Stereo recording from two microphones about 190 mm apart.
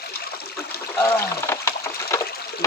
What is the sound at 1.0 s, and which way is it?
Speech, 15° left (ahead or behind).